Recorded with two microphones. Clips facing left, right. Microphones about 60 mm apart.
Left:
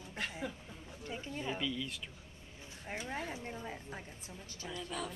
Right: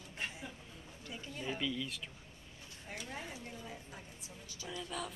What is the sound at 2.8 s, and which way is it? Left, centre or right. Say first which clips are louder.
Speech: left 5 dB; left.